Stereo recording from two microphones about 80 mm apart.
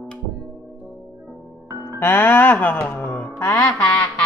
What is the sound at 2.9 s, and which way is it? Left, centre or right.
Music, left.